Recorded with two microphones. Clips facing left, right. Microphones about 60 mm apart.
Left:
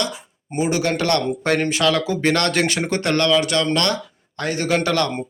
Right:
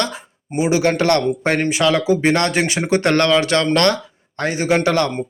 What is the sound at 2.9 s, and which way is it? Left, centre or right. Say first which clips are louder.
A man's voice: right 5 dB; right.